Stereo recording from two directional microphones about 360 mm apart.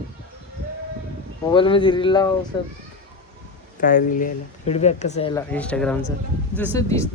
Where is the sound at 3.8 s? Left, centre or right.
Left.